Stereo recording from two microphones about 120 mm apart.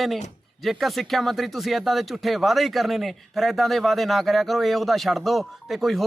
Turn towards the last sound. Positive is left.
turn(degrees=0)  # may be behind; listen again after turning